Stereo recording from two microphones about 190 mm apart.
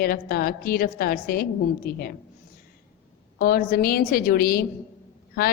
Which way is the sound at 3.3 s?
50° left (ahead or behind).